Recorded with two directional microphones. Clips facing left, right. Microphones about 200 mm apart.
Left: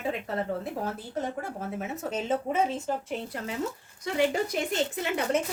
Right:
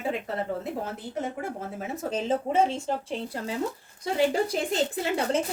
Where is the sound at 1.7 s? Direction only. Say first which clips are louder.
Right 2 dB; 30° right (ahead or behind).